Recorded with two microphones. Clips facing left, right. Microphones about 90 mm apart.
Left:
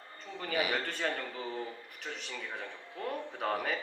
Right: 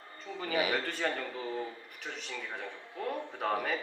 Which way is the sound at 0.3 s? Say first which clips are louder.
Right 1 dB; centre (ahead or behind).